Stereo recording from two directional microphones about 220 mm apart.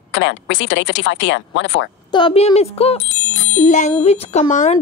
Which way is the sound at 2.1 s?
20° left (ahead or behind).